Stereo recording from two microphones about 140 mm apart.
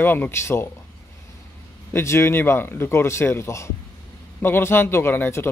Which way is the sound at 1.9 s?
20° left (ahead or behind).